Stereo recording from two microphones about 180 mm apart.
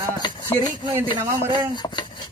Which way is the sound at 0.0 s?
25° left (ahead or behind).